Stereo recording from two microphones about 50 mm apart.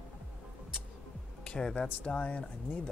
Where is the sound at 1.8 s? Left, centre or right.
Left.